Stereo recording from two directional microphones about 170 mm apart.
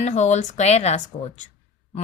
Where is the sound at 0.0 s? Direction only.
45° left (ahead or behind).